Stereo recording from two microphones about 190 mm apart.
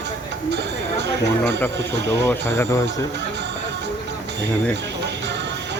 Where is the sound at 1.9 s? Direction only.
65° right (ahead or behind).